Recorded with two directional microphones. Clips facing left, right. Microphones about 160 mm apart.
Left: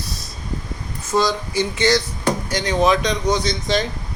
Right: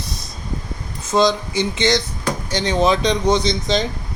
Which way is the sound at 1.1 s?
20° right (ahead or behind).